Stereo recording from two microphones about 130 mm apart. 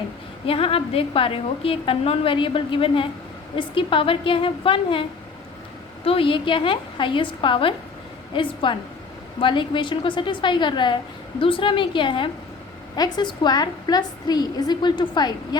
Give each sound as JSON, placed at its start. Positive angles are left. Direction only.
{"t": 0.4, "sound": "a woman's voice", "side_deg": 45}
{"t": 6.1, "sound": "a woman's voice", "side_deg": 45}